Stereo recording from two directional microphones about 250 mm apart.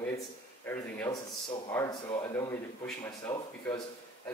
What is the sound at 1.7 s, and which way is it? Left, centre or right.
Speech, centre.